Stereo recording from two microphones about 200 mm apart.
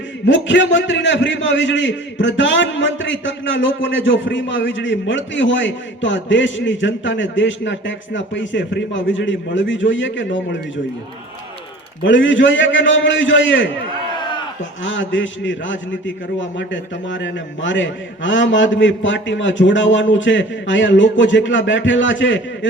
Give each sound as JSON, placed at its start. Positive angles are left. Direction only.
{"t": 0.3, "sound": "a man's voice", "side_deg": 65}
{"t": 12.0, "sound": "a man's voice", "side_deg": 70}
{"t": 14.2, "sound": "a sound", "side_deg": 25}
{"t": 14.8, "sound": "a man's voice", "side_deg": 70}